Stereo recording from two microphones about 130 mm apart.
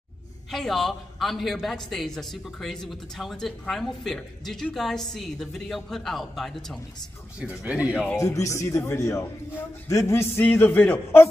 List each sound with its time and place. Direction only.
0.5 s a man's voice: centre (ahead or behind)
7.3 s speech: 10° right (ahead or behind)
8.2 s a man's voice: 25° left (ahead or behind)